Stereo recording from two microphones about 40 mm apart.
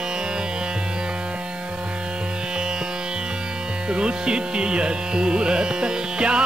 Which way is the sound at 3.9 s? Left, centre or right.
Right.